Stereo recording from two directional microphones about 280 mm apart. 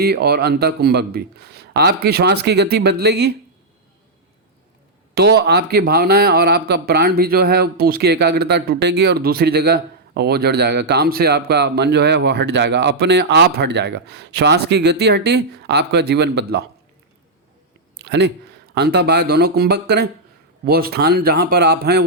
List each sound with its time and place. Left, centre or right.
0.0 s speech: right
5.1 s speech: right
17.9 s a sound: right
18.7 s speech: right